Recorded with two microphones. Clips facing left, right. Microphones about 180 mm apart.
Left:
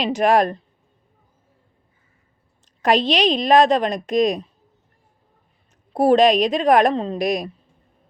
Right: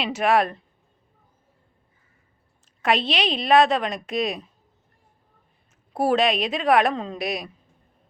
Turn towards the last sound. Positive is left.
turn(degrees=40)  # may be behind; listen again after turning